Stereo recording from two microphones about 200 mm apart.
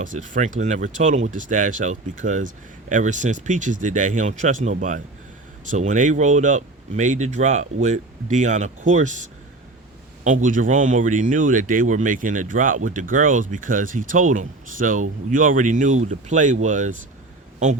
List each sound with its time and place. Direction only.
0.0 s speech: 40° right (ahead or behind)